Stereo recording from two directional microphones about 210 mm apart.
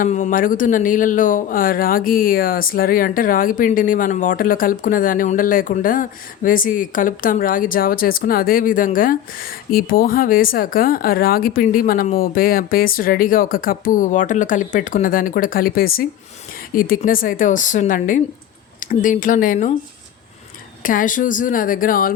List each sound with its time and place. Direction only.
0.0 s speech: 40° left (ahead or behind)
20.8 s speech: 40° left (ahead or behind)